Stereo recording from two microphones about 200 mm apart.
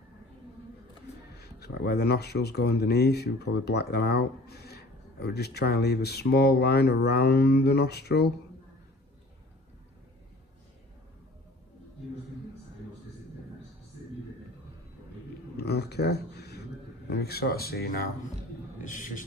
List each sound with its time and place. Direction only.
1.3 s speech: 55° left (ahead or behind)
15.5 s a sound: 55° left (ahead or behind)
17.1 s speech: 55° left (ahead or behind)
18.9 s a man's voice: 40° left (ahead or behind)